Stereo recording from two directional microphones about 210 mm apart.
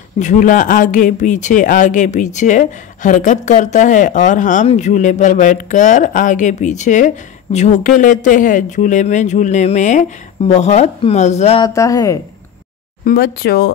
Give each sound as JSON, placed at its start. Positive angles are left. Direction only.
{"t": 0.2, "sound": "speech", "side_deg": 35}
{"t": 11.6, "sound": "speech", "side_deg": 15}
{"t": 13.0, "sound": "speech", "side_deg": 45}